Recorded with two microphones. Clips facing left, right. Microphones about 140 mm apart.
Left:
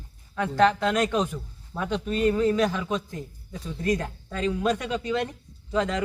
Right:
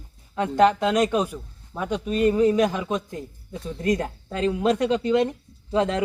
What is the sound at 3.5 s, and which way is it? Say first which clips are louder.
Speech: right 2 dB; 25° right (ahead or behind).